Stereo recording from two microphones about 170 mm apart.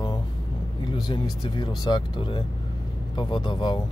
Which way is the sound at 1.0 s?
25° left (ahead or behind).